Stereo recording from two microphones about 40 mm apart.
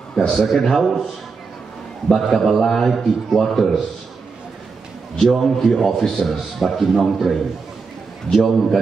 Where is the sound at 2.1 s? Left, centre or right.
Centre.